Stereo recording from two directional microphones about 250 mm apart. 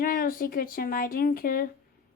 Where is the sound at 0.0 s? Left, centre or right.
Left.